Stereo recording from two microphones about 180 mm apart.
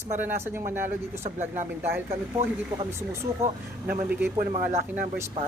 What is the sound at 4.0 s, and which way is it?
Speech, 15° right (ahead or behind).